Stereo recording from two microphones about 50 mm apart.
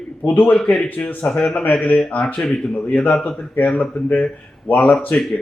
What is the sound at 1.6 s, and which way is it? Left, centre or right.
Speech, left.